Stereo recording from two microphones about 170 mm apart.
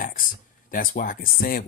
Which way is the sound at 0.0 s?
55° left (ahead or behind).